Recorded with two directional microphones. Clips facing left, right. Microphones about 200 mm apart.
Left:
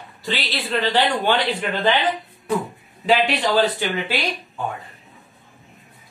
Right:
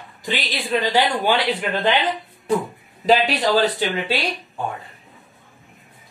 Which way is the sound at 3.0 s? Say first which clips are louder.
Right 1 dB; 40° right (ahead or behind).